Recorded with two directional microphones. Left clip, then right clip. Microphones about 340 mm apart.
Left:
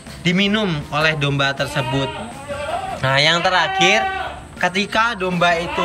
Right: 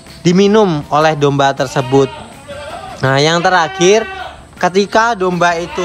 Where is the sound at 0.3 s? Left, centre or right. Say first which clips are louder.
Right 9 dB; centre.